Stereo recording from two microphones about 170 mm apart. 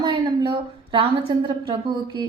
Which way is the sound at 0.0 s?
30° right (ahead or behind).